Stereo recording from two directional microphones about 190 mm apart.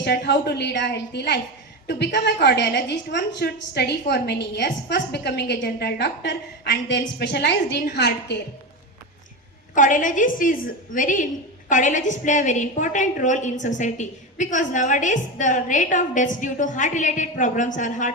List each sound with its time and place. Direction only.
0.0 s a woman's voice: 60° left (ahead or behind)
9.7 s a woman's voice: 40° left (ahead or behind)